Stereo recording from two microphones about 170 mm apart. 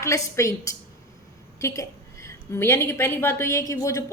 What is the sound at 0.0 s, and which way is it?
A woman's voice, 20° left (ahead or behind).